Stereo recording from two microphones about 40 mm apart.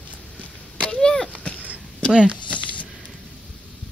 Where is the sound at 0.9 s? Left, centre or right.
Centre.